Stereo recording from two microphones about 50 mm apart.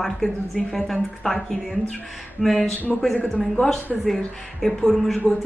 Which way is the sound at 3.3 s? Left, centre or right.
Centre.